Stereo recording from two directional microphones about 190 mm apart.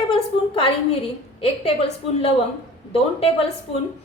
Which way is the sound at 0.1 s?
30° left (ahead or behind).